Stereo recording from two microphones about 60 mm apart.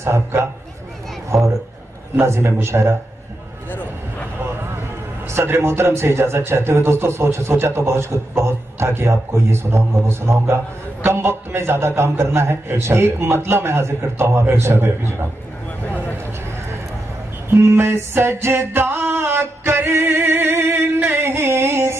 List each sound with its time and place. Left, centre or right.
0.0 s a man's voice: right
1.3 s a man's voice: centre
2.1 s a man's voice: right
5.3 s a man's voice: right
17.5 s a sound: right